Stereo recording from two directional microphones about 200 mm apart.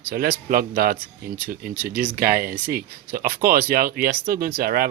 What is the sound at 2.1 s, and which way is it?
Speech, 50° right (ahead or behind).